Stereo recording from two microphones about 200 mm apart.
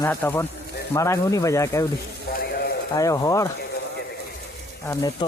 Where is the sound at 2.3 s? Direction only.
50° left (ahead or behind).